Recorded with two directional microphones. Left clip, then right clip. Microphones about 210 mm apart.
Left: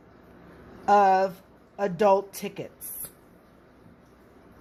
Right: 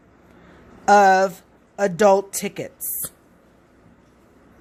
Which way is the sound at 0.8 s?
45° right (ahead or behind).